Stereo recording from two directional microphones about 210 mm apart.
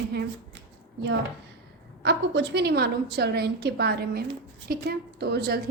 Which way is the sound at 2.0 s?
55° right (ahead or behind).